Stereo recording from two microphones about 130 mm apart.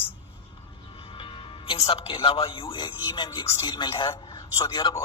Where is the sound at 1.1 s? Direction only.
40° left (ahead or behind).